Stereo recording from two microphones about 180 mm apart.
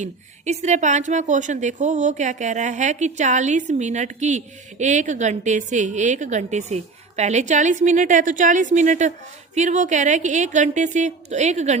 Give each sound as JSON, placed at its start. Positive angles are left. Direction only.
{"t": 0.0, "sound": "a woman's voice", "side_deg": -40}